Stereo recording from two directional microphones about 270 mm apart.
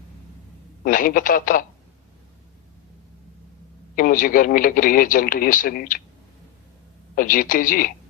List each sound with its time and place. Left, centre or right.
0.9 s speech: left
3.9 s speech: left
7.2 s speech: left